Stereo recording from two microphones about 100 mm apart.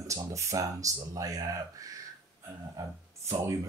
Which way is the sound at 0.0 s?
30° right (ahead or behind).